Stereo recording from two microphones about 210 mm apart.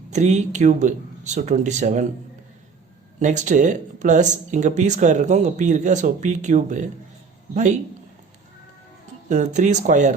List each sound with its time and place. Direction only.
0.1 s speech: 35° right (ahead or behind)
3.2 s speech: 35° right (ahead or behind)
9.3 s speech: 35° right (ahead or behind)